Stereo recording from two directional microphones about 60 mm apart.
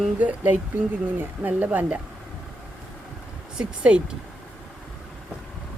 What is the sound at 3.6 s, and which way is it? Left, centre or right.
Speech, centre.